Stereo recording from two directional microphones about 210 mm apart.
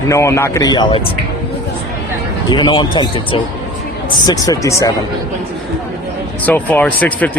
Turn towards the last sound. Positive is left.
turn(degrees=5)  # may be behind; listen again after turning